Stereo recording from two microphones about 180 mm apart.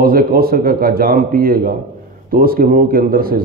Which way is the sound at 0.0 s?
55° right (ahead or behind).